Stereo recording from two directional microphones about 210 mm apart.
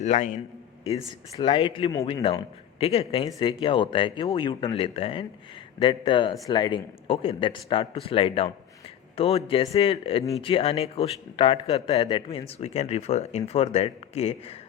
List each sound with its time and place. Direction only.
0.0 s a man's voice: 35° left (ahead or behind)
0.9 s speech: 25° left (ahead or behind)